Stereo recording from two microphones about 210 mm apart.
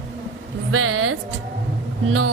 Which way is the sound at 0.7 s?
90° right.